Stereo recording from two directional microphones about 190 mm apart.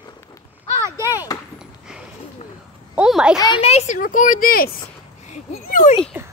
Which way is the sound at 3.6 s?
35° left (ahead or behind).